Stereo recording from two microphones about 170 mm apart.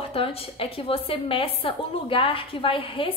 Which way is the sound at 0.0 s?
35° left (ahead or behind).